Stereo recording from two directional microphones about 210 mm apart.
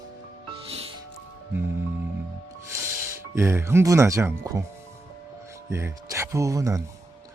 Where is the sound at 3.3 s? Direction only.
15° right (ahead or behind).